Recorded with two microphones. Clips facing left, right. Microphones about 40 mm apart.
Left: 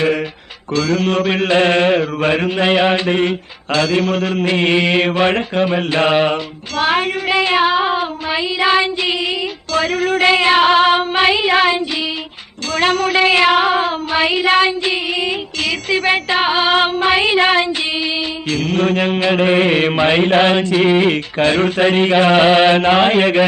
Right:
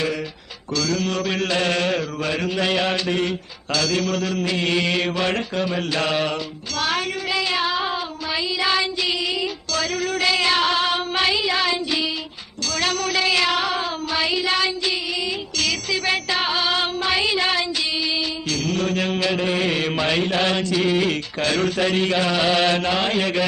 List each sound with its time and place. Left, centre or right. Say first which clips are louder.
0.7 s mantra: left 7 dB; left